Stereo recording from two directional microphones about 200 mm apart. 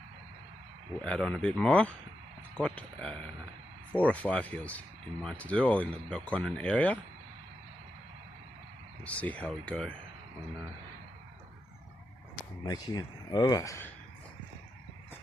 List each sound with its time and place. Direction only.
1.0 s speech: 5° left (ahead or behind)
9.0 s speech: 5° left (ahead or behind)
12.6 s speech: 20° left (ahead or behind)